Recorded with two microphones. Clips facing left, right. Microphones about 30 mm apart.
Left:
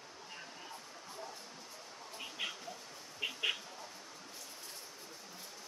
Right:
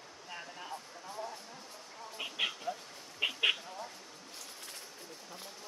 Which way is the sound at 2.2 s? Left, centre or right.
Right.